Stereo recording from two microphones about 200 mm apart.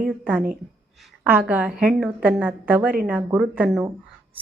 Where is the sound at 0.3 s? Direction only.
10° right (ahead or behind).